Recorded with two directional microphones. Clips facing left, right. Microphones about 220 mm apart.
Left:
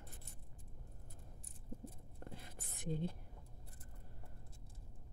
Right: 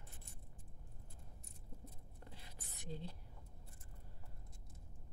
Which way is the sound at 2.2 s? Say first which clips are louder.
Left 6 dB; 50° left (ahead or behind).